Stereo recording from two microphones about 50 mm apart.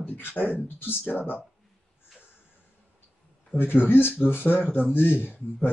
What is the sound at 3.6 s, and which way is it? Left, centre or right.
Speech, left.